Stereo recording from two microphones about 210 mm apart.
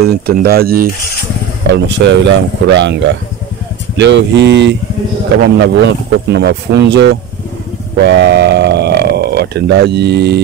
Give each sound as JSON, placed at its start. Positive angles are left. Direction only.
{"t": 0.0, "sound": "speech", "side_deg": -50}
{"t": 1.7, "sound": "speech", "side_deg": -55}